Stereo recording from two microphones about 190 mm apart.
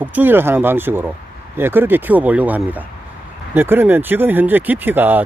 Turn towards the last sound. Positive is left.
turn(degrees=-10)  # may be behind; listen again after turning